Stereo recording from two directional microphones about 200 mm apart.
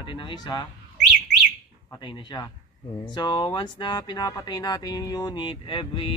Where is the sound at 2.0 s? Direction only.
20° left (ahead or behind).